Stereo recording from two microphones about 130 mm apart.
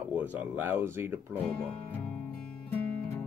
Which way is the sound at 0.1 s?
15° right (ahead or behind).